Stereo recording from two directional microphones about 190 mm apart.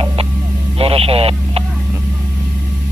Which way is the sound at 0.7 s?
30° right (ahead or behind).